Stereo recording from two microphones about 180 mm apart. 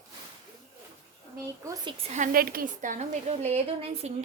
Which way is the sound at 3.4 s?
35° right (ahead or behind).